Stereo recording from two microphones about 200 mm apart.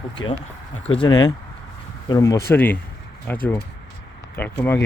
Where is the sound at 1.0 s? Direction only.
20° left (ahead or behind).